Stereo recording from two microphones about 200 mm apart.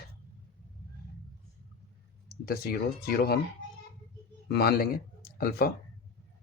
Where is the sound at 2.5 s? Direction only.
50° left (ahead or behind).